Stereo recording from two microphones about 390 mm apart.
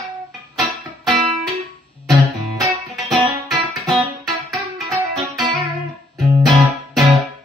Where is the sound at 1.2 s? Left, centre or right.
Left.